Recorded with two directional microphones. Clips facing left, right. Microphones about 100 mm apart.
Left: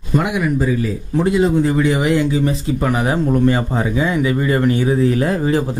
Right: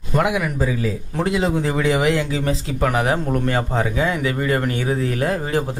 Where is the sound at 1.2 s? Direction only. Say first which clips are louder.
Left 5 dB; 90° right; by 3.2 s 75° right (ahead or behind).